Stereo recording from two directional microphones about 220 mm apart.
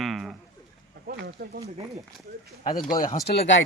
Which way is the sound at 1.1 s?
45° right (ahead or behind).